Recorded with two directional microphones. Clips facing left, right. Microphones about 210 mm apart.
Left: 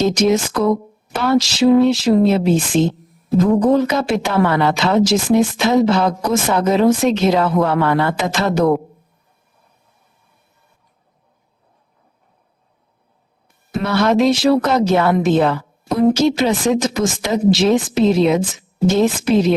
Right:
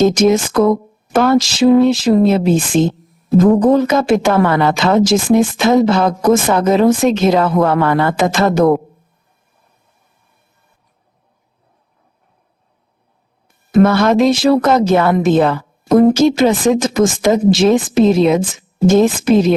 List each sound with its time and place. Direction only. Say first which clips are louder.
0.0 s speech: right 4 dB; 50° right (ahead or behind)
13.7 s speech: right 6 dB; 50° right (ahead or behind)